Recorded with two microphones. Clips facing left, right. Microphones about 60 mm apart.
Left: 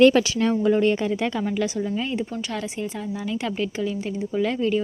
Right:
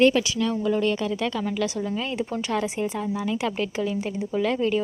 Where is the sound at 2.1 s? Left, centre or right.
Centre.